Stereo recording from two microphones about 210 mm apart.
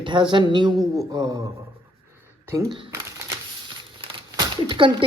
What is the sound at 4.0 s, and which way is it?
Crumpling, 20° right (ahead or behind).